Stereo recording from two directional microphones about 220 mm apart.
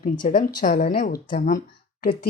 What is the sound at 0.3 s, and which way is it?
A woman's voice, 35° left (ahead or behind).